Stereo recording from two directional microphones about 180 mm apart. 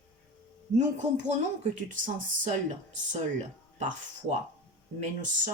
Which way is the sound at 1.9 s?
45° right (ahead or behind).